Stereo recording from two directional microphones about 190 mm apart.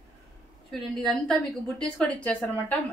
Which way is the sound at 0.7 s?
Centre (ahead or behind).